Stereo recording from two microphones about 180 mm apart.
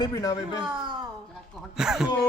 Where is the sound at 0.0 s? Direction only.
20° left (ahead or behind).